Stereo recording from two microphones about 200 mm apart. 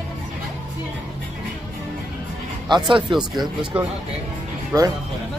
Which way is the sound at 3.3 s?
20° right (ahead or behind).